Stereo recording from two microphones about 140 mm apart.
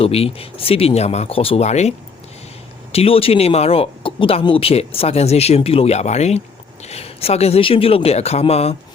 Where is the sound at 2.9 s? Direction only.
40° left (ahead or behind).